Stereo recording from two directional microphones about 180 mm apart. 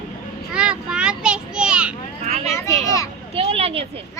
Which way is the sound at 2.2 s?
40° right (ahead or behind).